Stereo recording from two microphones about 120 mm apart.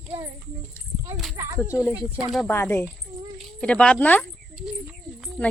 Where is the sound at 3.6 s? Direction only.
10° left (ahead or behind).